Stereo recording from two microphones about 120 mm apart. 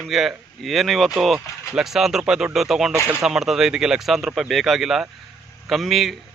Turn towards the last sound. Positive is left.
turn(degrees=0)  # may be behind; listen again after turning